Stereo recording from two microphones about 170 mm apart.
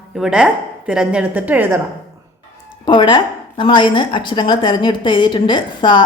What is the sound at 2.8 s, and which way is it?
A woman's voice, 25° left (ahead or behind).